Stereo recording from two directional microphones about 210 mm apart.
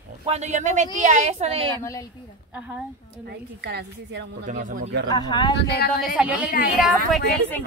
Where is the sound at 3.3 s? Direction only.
55° right (ahead or behind).